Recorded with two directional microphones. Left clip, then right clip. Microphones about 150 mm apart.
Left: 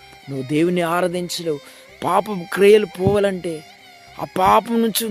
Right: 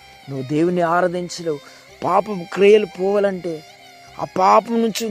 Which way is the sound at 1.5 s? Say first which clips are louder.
Left 1 dB; 5° left (ahead or behind).